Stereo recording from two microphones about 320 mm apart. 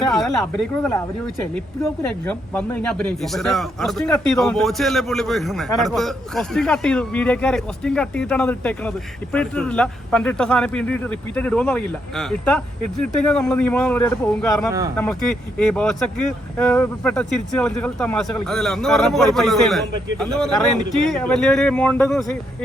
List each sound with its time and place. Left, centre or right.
0.1 s speech: centre
14.7 s speech: centre
14.9 s speech: centre